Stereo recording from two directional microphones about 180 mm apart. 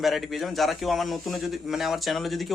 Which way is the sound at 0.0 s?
Centre (ahead or behind).